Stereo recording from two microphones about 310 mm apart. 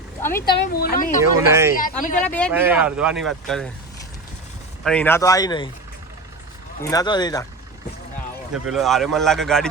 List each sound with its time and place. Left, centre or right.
0.2 s speech: centre
0.5 s speech: left
1.2 s speech: centre
2.2 s speech: centre
4.8 s speech: centre
6.8 s speech: centre
8.5 s speech: centre